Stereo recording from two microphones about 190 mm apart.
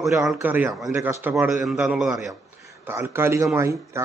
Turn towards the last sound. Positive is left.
turn(degrees=-15)  # may be behind; listen again after turning